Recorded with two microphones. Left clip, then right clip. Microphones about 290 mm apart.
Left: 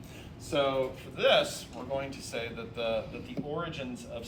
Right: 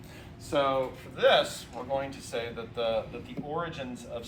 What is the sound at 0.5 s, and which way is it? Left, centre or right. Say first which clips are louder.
Speech: right 2 dB; centre.